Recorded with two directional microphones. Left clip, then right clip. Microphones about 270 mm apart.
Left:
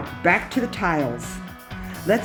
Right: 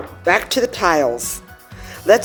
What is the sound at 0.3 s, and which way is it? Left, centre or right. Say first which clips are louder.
Speech: right 4 dB; right.